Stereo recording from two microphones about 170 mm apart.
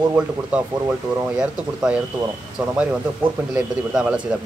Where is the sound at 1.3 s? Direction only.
5° right (ahead or behind).